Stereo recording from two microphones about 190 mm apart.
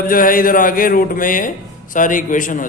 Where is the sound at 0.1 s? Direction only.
45° left (ahead or behind).